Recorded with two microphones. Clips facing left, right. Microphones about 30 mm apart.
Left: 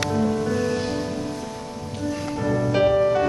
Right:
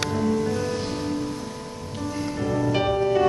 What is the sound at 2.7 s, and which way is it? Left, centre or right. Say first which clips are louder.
Music: left 4 dB; centre.